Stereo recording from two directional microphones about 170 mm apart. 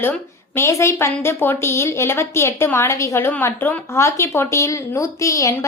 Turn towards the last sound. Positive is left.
turn(degrees=20)  # may be behind; listen again after turning